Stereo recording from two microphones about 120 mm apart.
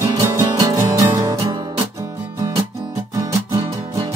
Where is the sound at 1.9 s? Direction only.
25° right (ahead or behind).